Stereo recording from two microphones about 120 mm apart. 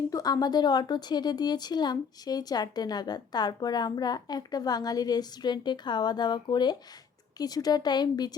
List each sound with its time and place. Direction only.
0.1 s speech: 30° left (ahead or behind)